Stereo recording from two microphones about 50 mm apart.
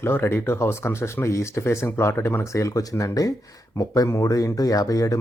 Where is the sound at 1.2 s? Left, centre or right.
Left.